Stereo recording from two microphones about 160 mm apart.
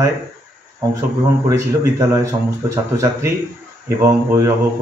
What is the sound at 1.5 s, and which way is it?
Speech, 20° right (ahead or behind).